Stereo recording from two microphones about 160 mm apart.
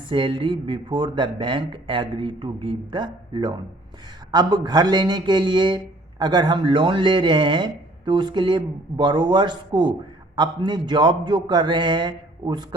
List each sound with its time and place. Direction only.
0.1 s speech: 30° right (ahead or behind)